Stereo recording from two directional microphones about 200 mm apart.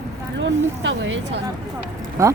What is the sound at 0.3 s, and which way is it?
Speech, 65° right (ahead or behind).